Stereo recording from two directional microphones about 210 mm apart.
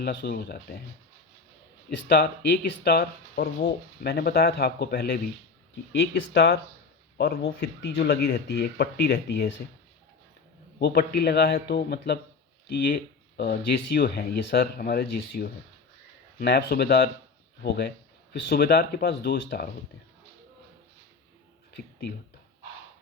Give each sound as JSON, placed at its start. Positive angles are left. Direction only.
{"t": 0.0, "sound": "speech", "side_deg": 45}
{"t": 2.1, "sound": "speech", "side_deg": 45}
{"t": 10.8, "sound": "speech", "side_deg": 50}